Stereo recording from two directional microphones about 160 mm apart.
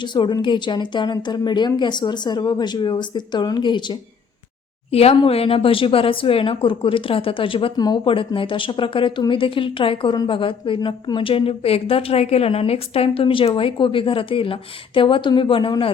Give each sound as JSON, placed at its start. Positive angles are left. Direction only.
{"t": 0.0, "sound": "a woman's voice", "side_deg": 30}